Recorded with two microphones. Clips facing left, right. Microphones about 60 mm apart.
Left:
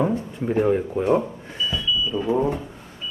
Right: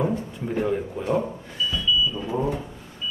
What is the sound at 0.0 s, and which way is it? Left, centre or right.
Speech, centre.